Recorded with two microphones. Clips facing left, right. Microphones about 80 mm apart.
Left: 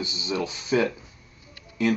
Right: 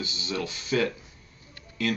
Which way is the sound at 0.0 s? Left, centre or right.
Left.